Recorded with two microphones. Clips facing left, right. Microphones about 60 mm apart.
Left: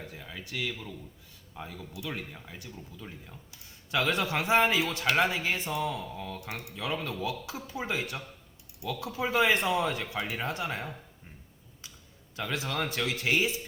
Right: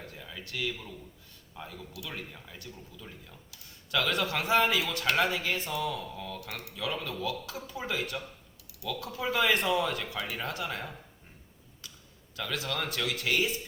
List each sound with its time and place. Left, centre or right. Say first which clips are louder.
0.0 s a sound: left 1 dB; centre
1.5 s speech: left 2 dB; centre
12.4 s speech: left 2 dB; left